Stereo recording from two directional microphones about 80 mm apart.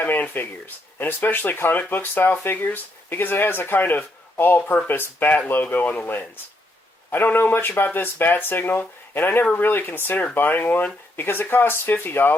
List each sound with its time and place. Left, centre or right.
0.0 s speech: left